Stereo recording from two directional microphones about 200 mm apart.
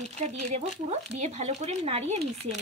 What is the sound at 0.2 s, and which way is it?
A woman's voice, 30° right (ahead or behind).